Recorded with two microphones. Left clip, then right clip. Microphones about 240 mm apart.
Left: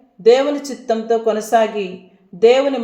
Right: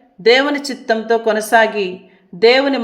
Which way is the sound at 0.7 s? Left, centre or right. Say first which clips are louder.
Right 2 dB; right.